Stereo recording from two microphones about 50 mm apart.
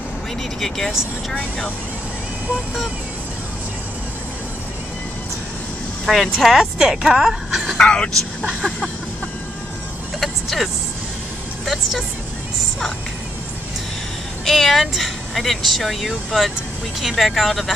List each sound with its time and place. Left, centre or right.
0.6 s speech: centre
6.3 s a woman's voice: centre
7.7 s speech: centre
8.6 s music: centre
10.2 s vehicle: centre
14.4 s speech: centre